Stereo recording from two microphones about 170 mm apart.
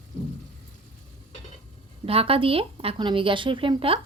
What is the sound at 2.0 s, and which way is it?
Speech, 35° right (ahead or behind).